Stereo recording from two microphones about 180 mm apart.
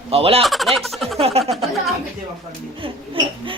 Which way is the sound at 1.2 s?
35° right (ahead or behind).